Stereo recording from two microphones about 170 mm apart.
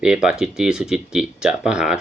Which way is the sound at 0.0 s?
5° right (ahead or behind).